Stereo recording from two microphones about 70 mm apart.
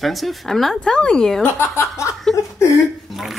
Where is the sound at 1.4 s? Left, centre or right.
Left.